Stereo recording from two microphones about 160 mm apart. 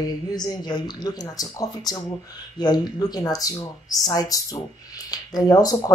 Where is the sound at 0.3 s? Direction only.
25° left (ahead or behind).